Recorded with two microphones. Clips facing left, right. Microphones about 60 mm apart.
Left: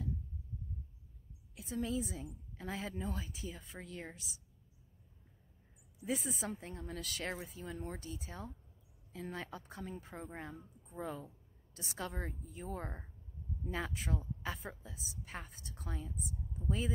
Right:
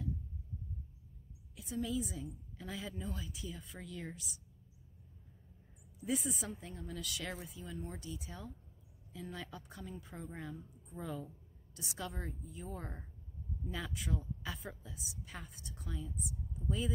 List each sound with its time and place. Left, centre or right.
1.6 s a woman's voice: left
6.0 s a woman's voice: left